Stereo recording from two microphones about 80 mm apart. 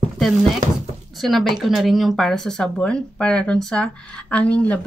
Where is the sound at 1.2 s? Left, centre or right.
Centre.